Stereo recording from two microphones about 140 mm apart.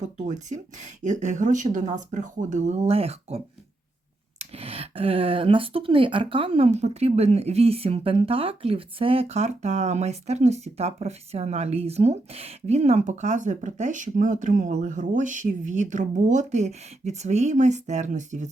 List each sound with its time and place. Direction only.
0.0 s speech: 60° right (ahead or behind)